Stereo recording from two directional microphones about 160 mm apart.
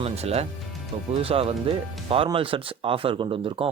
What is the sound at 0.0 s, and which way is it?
Speech, 40° right (ahead or behind).